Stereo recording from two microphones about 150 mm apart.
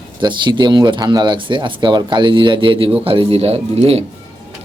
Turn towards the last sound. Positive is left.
turn(degrees=-40)  # may be behind; listen again after turning